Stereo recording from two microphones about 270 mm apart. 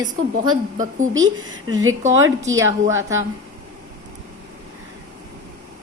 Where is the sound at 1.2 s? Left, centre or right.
Right.